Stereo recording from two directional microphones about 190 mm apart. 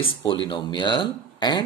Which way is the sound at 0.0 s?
25° left (ahead or behind).